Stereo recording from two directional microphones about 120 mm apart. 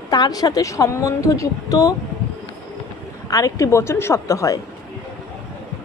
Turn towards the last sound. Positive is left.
turn(degrees=25)  # may be behind; listen again after turning